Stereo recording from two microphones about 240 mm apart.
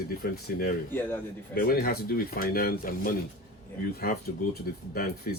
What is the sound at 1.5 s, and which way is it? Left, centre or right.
Speech, left.